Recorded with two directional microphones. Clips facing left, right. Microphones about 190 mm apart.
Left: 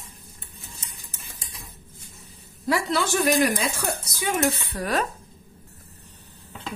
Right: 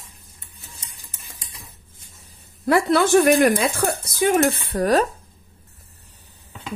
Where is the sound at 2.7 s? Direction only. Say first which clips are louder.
Right 7 dB; 55° right (ahead or behind); by 5.1 s 40° right (ahead or behind).